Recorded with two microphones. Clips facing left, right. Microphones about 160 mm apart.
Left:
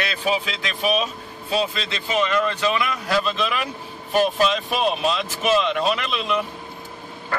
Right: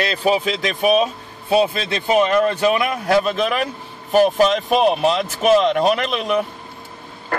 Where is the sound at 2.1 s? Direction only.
50° right (ahead or behind).